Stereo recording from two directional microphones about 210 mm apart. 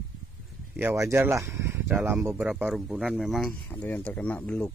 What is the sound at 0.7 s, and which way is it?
Speech, 10° right (ahead or behind).